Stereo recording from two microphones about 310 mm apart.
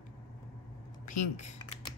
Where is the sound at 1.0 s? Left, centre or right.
Left.